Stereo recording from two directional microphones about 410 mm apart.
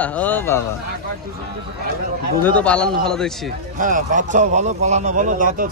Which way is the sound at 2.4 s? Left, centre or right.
Centre.